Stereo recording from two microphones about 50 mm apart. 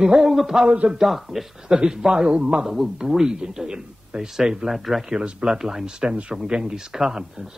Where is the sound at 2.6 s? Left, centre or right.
Centre.